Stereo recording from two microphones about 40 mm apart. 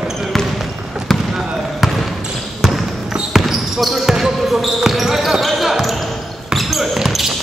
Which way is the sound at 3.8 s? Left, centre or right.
Centre.